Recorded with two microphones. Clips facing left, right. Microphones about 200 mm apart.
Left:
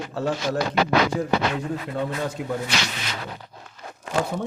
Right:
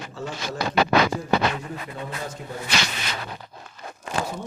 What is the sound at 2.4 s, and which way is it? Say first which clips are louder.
Speech: left 8 dB; 70° left (ahead or behind).